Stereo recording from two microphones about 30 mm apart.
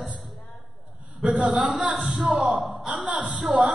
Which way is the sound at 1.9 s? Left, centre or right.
Centre.